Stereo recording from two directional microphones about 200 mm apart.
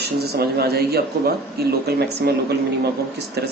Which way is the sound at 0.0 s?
55° right (ahead or behind).